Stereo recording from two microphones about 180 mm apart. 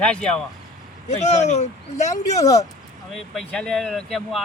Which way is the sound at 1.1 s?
40° left (ahead or behind).